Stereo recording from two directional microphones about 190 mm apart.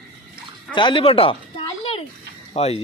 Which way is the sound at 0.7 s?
25° left (ahead or behind).